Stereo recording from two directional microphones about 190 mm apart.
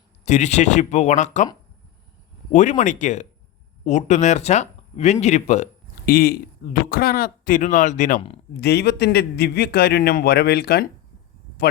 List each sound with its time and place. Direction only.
0.3 s speech: 40° left (ahead or behind)
2.5 s speech: 40° left (ahead or behind)
6.1 s speech: 50° left (ahead or behind)
8.6 s a man's voice: 60° left (ahead or behind)